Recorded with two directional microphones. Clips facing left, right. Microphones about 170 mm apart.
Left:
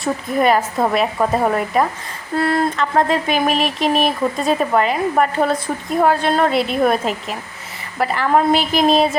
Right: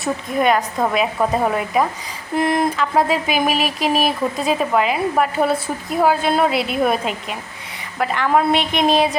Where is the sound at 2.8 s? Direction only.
5° right (ahead or behind).